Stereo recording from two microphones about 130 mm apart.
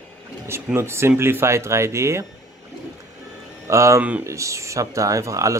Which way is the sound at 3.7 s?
25° right (ahead or behind).